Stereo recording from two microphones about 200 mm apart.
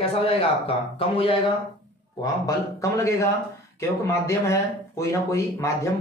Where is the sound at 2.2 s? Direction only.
15° left (ahead or behind).